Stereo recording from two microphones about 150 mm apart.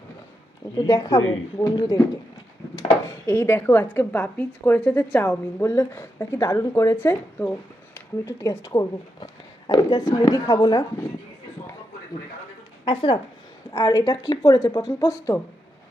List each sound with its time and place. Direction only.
0.9 s speech: 20° left (ahead or behind)
2.9 s a woman's voice: 15° left (ahead or behind)
12.8 s a woman's voice: 35° left (ahead or behind)
13.7 s speech: 25° left (ahead or behind)